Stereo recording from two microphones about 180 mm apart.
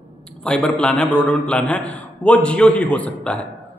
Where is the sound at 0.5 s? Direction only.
5° left (ahead or behind).